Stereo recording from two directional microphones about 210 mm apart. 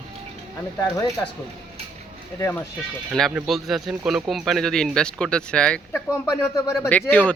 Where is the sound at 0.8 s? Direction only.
15° left (ahead or behind).